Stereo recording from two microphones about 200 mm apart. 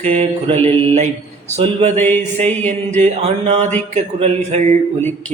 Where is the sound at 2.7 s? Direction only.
35° right (ahead or behind).